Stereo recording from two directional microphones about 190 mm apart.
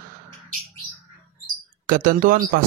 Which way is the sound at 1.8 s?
50° right (ahead or behind).